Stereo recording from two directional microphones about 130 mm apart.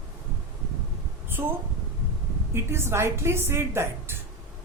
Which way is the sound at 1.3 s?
15° right (ahead or behind).